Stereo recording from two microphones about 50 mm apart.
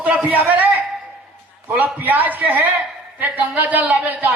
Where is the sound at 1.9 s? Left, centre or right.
Right.